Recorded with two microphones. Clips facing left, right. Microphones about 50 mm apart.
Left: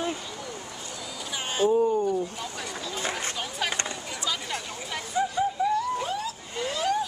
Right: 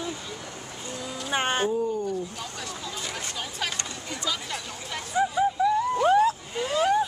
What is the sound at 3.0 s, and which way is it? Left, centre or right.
Chatter, left.